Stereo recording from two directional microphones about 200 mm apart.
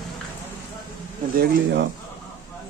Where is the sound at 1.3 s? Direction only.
55° right (ahead or behind).